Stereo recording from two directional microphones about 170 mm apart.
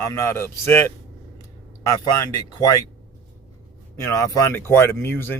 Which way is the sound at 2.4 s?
20° left (ahead or behind).